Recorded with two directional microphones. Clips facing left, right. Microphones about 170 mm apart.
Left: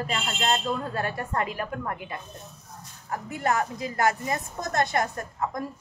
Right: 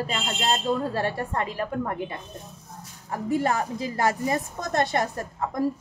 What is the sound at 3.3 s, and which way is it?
A woman's voice, 30° right (ahead or behind).